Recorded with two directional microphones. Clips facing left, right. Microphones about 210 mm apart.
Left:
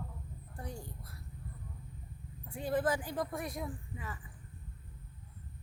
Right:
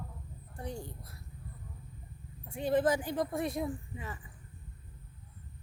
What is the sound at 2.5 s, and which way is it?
Speech, 25° right (ahead or behind).